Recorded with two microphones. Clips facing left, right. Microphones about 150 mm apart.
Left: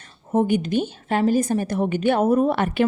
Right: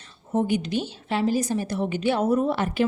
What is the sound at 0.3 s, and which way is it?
A woman's voice, 50° left (ahead or behind).